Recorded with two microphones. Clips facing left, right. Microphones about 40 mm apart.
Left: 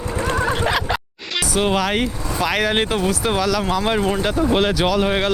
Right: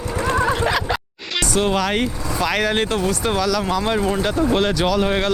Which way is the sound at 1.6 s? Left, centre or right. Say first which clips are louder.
Left 2 dB; centre.